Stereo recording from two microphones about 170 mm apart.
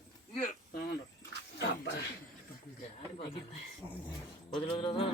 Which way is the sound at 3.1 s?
35° left (ahead or behind).